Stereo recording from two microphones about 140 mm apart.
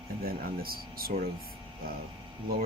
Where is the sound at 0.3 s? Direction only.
90° right.